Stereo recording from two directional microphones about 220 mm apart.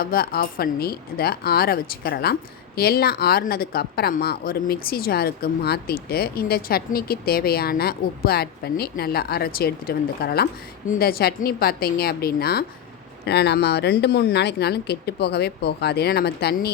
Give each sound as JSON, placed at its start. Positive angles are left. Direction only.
{"t": 0.0, "sound": "speech", "side_deg": 45}